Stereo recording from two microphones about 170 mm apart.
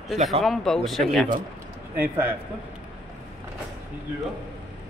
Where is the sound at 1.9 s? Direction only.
10° right (ahead or behind).